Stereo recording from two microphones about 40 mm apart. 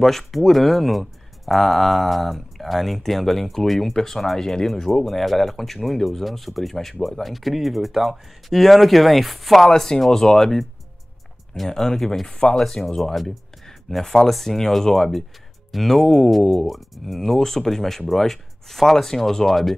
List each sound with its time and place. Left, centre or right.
0.0 s speech: centre
12.3 s speech: left
13.1 s speech: centre